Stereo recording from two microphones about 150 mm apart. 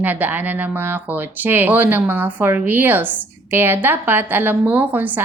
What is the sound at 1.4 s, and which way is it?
A woman's voice, 15° right (ahead or behind).